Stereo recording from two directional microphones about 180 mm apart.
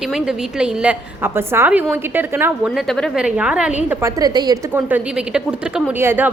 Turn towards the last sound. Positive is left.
turn(degrees=-10)  # may be behind; listen again after turning